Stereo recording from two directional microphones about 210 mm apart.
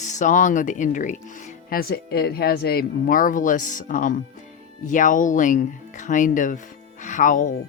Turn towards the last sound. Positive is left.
turn(degrees=35)  # may be behind; listen again after turning